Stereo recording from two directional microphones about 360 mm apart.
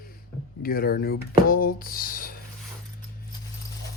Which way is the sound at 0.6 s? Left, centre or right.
Left.